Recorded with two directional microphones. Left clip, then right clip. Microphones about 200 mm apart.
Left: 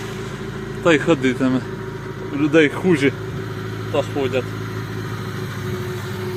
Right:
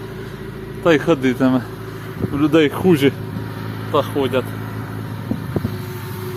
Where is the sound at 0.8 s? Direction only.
Centre (ahead or behind).